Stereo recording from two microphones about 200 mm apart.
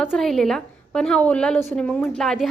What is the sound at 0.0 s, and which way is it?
A woman's voice, centre (ahead or behind).